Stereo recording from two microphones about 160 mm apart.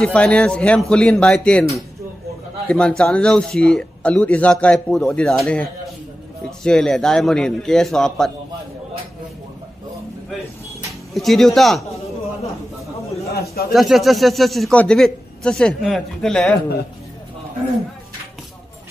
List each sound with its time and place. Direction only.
0.0 s speech: 5° left (ahead or behind)
2.7 s speech: 5° left (ahead or behind)
11.1 s speech: centre (ahead or behind)
13.3 s a sound: 75° left (ahead or behind)
13.7 s speech: centre (ahead or behind)